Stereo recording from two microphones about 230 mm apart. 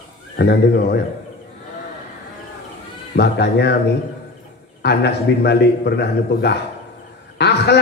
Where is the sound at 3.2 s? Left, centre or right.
Left.